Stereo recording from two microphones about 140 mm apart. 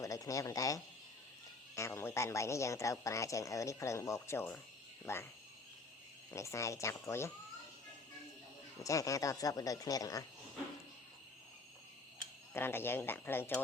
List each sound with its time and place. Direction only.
0.0 s a woman's voice: 25° left (ahead or behind)
6.3 s a woman's voice: 20° left (ahead or behind)
8.8 s a woman's voice: 25° left (ahead or behind)
12.5 s speech: 15° left (ahead or behind)